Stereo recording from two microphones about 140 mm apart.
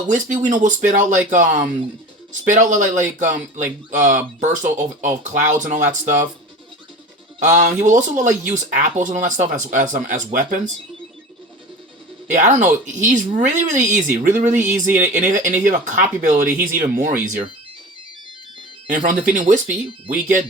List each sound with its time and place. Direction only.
0.4 s speech: 65° right (ahead or behind)
7.3 s speech: 60° right (ahead or behind)
12.3 s speech: 60° right (ahead or behind)
14.9 s speech: 15° right (ahead or behind)
15.3 s speech: 70° right (ahead or behind)
16.7 s speech: 85° right; by 17.4 s 65° right (ahead or behind)
18.9 s speech: 70° right (ahead or behind)